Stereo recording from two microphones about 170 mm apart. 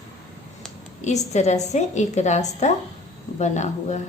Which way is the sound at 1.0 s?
45° left (ahead or behind).